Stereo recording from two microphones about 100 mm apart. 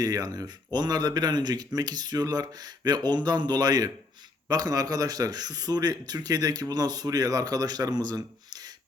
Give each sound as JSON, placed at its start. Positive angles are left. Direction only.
{"t": 0.0, "sound": "speech", "side_deg": -40}